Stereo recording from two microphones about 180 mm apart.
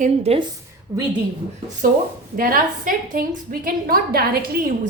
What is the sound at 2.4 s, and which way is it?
A woman's voice, 50° right (ahead or behind).